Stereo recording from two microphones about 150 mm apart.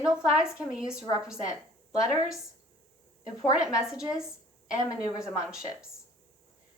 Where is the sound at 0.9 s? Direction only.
25° left (ahead or behind).